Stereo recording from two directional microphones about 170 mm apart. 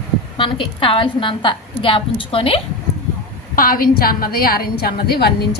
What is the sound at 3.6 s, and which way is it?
A woman's voice, 55° left (ahead or behind).